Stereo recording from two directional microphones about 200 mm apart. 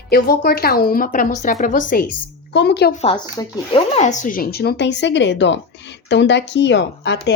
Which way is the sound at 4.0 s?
35° left (ahead or behind).